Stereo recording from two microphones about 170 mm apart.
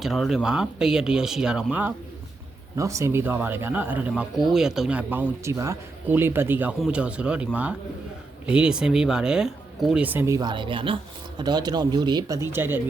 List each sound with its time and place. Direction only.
0.0 s speech: centre (ahead or behind)
2.7 s speech: 20° right (ahead or behind)